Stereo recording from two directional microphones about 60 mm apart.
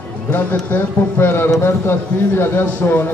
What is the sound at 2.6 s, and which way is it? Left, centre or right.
Speech, left.